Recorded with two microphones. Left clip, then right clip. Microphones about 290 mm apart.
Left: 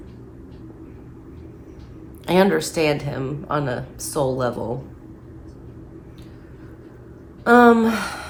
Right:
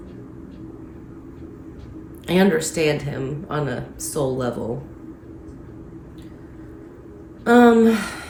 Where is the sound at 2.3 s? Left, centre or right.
Centre.